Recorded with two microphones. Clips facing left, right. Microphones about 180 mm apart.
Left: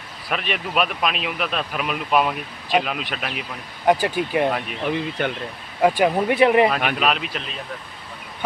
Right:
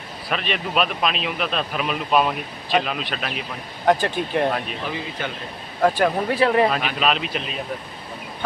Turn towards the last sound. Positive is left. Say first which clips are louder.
# right 1 dB
turn(degrees=5)  # may be behind; listen again after turning